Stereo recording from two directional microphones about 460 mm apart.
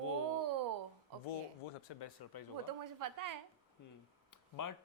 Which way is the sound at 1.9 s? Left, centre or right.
Left.